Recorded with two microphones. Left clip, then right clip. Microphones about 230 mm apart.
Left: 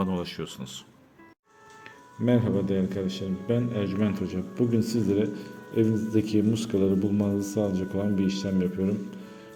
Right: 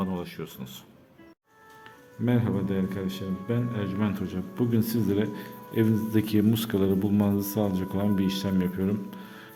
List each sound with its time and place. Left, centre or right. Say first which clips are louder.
0.0 s speech: left 3 dB; centre
2.2 s a man's voice: left 3 dB; centre